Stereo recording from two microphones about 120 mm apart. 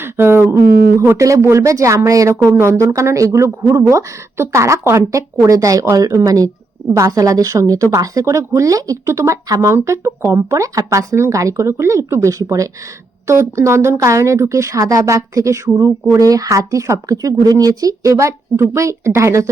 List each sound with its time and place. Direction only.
0.0 s speech: 20° right (ahead or behind)